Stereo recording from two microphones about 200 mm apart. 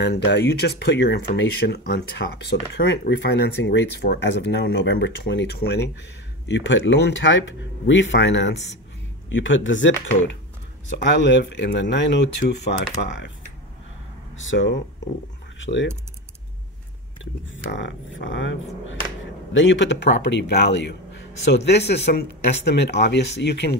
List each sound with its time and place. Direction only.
0.0 s speech: 60° left (ahead or behind)
14.3 s speech: 70° left (ahead or behind)
17.2 s speech: 70° left (ahead or behind)